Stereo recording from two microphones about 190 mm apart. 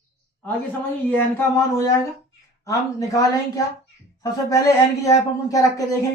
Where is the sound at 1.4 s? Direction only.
15° left (ahead or behind).